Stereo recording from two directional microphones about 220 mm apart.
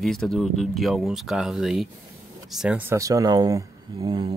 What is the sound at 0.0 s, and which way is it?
Speech, centre (ahead or behind).